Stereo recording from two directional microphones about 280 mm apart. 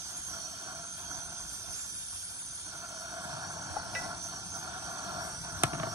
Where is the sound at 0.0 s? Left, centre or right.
Centre.